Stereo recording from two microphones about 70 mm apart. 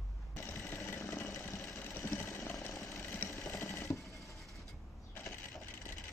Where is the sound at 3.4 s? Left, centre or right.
Left.